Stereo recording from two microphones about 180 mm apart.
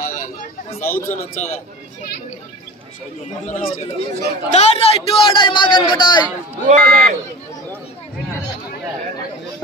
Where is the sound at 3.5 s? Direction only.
35° left (ahead or behind).